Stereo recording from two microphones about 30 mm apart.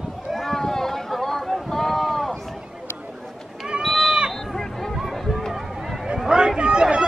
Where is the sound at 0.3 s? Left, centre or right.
Centre.